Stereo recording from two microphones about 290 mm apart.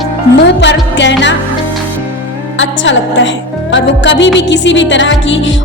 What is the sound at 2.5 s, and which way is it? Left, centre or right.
Music, left.